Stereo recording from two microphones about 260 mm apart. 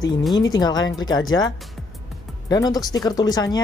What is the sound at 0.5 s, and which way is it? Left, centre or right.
Speech, centre.